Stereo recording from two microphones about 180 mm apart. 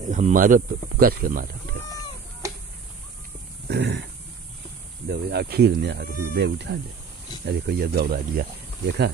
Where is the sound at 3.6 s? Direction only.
70° right (ahead or behind).